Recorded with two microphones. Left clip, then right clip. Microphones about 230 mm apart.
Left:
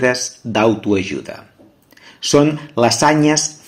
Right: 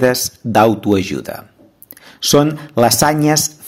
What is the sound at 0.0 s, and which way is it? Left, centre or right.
Speech, right.